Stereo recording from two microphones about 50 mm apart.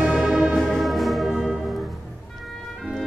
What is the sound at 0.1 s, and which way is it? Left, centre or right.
Music, centre.